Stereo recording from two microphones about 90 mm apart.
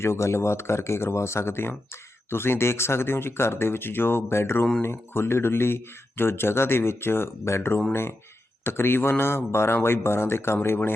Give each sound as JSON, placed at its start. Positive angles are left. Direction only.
{"t": 0.0, "sound": "speech", "side_deg": 30}